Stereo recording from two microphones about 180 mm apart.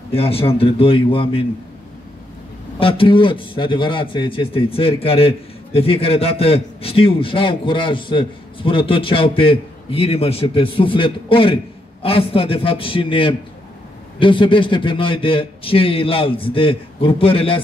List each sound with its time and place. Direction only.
0.1 s a man's voice: 30° left (ahead or behind)
2.8 s a man's voice: 30° left (ahead or behind)